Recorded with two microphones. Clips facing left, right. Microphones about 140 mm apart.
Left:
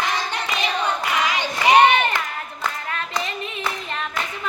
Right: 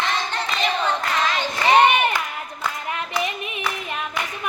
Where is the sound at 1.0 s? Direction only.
10° left (ahead or behind).